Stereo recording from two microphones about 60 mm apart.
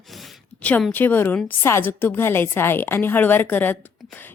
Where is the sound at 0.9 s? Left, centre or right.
Left.